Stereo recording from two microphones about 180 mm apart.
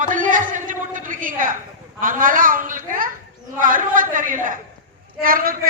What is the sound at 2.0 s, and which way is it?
A man's voice, 50° right (ahead or behind).